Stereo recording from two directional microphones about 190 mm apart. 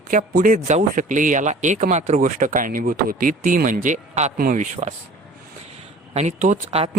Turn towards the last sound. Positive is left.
turn(degrees=-35)  # may be behind; listen again after turning